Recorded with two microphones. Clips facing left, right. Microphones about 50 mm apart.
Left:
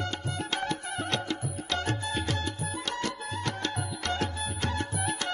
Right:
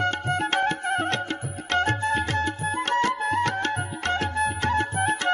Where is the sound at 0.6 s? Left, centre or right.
Right.